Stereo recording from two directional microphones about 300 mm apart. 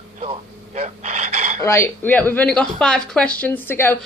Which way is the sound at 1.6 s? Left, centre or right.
Centre.